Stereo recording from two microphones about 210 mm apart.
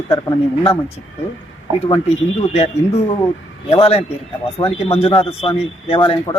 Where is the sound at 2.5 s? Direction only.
30° left (ahead or behind).